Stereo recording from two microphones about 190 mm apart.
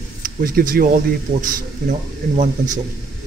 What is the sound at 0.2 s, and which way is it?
Speech, 50° right (ahead or behind).